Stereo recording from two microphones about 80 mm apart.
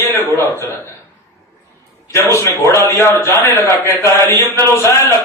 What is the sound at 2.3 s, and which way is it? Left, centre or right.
A man's voice, left.